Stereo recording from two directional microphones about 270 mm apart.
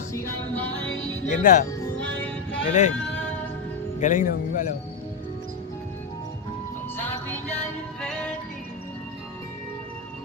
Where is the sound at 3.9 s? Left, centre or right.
Left.